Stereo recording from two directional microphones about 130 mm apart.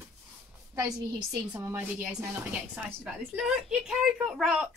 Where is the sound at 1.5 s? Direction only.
15° right (ahead or behind).